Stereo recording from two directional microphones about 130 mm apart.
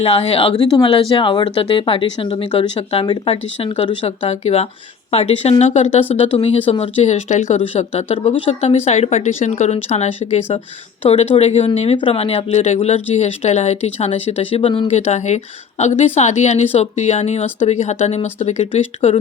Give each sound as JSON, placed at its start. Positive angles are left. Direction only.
{"t": 0.0, "sound": "speech", "side_deg": 50}
{"t": 4.4, "sound": "speech", "side_deg": 50}
{"t": 14.9, "sound": "speech", "side_deg": 60}